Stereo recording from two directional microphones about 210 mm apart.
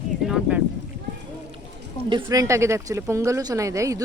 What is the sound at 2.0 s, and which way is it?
Speech, 20° right (ahead or behind).